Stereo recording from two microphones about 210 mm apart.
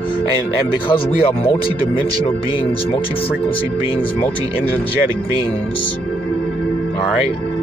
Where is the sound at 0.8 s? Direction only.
25° left (ahead or behind).